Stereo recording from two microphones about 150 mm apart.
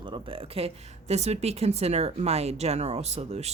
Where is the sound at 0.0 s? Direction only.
35° right (ahead or behind).